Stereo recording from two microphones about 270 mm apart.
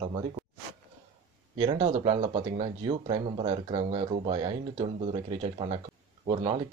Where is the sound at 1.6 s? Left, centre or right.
Right.